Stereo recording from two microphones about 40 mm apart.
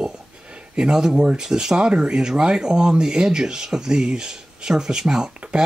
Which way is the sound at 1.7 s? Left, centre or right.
Right.